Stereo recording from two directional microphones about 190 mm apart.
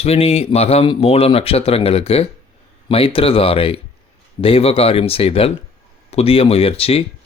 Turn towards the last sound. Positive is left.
turn(degrees=30)  # may be behind; listen again after turning